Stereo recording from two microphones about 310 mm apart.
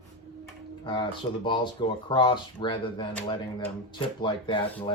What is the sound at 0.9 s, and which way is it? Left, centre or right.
Speech, centre.